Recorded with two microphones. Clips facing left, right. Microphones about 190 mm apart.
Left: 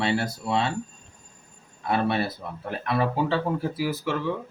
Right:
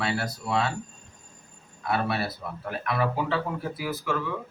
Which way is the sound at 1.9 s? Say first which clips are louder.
Left 3 dB; 25° left (ahead or behind).